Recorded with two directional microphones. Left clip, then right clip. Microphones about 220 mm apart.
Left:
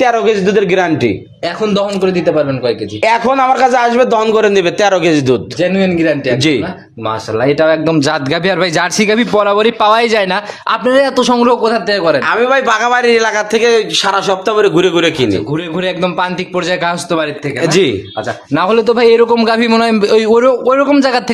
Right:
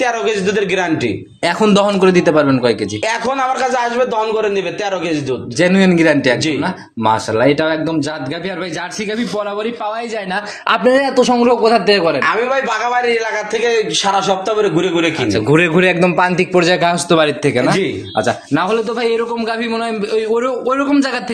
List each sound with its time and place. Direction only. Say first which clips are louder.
0.0 s a man's voice: left 5 dB; 35° left (ahead or behind)
1.6 s a man's voice: right 1 dB; 20° right (ahead or behind)
3.0 s a man's voice: left 6 dB; 40° left (ahead or behind)
5.6 s a man's voice: even; 25° right (ahead or behind)
7.3 s a man's voice: left 3 dB; 15° left (ahead or behind)
8.5 s a man's voice: left 10 dB; 40° left (ahead or behind)
10.9 s a man's voice: left 3 dB; 20° left (ahead or behind)
12.4 s a man's voice: left 5 dB; 50° left (ahead or behind)
15.7 s a man's voice: right 3 dB; 5° right (ahead or behind)
18.7 s a man's voice: left 11 dB; 35° left (ahead or behind)